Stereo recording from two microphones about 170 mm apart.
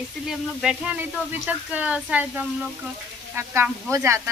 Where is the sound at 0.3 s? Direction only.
5° right (ahead or behind).